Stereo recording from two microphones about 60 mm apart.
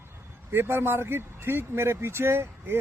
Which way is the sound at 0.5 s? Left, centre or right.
Right.